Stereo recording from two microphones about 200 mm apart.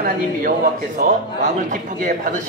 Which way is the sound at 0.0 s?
45° right (ahead or behind).